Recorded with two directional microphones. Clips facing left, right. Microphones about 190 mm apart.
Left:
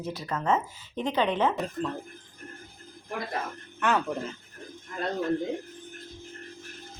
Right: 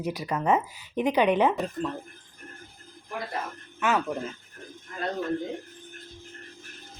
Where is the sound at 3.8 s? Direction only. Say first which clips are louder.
Even; centre (ahead or behind).